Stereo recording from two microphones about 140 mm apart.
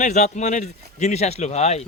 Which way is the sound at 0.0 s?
55° left (ahead or behind).